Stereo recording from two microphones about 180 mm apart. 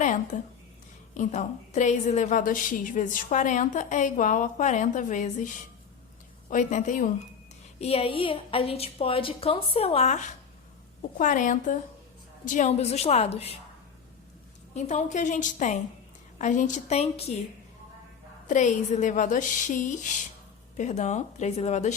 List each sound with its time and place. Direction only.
0.0 s a sound: 45° left (ahead or behind)
1.1 s a woman's voice: 40° left (ahead or behind)
6.5 s a woman's voice: 45° left (ahead or behind)
7.8 s a woman's voice: 35° left (ahead or behind)
14.7 s a woman's voice: 40° left (ahead or behind)
18.4 s a woman's voice: 45° left (ahead or behind)